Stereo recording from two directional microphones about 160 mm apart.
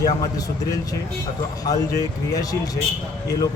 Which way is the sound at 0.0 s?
25° left (ahead or behind).